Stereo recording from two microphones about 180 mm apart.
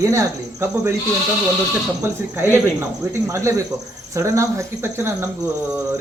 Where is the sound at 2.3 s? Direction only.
15° right (ahead or behind).